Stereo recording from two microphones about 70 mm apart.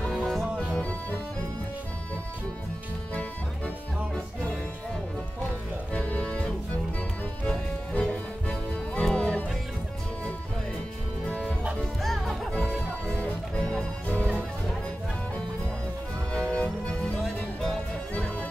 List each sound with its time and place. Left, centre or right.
0.1 s music: centre
3.2 s music: centre
5.9 s music: centre
11.2 s music: centre
16.3 s music: centre